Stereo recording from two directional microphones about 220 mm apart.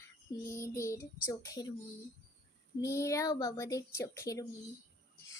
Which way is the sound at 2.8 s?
15° left (ahead or behind).